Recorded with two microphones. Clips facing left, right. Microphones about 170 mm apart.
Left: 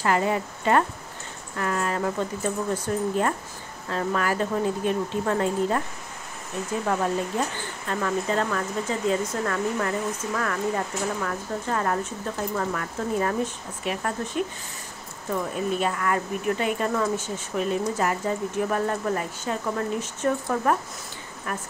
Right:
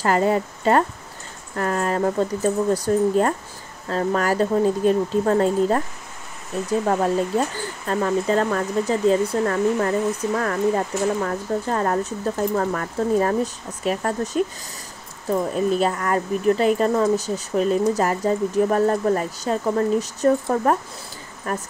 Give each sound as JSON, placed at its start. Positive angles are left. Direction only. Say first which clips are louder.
{"t": 0.0, "sound": "speech", "louder": "right 4 dB", "side_deg": -40}
{"t": 6.9, "sound": "speech", "louder": "right 4 dB", "side_deg": -35}